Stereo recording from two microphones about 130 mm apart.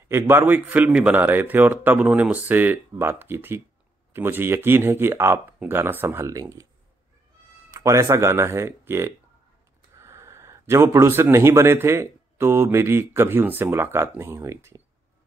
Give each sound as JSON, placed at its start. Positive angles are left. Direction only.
{"t": 0.1, "sound": "a man's voice", "side_deg": -15}
{"t": 7.7, "sound": "speech", "side_deg": -25}